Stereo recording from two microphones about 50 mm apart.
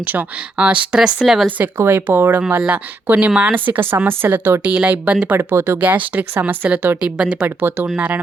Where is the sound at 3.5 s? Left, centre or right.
Right.